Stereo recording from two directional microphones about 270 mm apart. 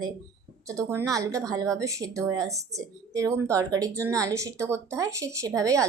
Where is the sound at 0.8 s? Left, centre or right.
Centre.